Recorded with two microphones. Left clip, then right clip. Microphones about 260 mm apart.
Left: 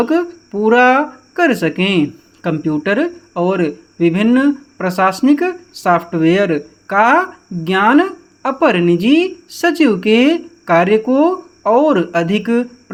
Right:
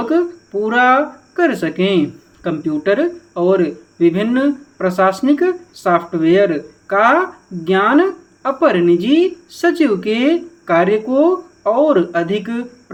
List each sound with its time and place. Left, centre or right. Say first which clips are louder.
0.0 s speech: left 1 dB; left